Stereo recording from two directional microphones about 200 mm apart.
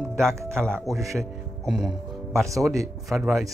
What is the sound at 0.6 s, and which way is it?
Speech, 5° left (ahead or behind).